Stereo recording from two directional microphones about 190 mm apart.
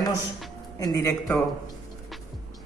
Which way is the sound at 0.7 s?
15° left (ahead or behind).